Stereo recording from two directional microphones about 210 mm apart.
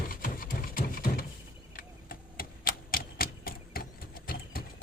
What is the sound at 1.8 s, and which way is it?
Typewriter, 45° left (ahead or behind).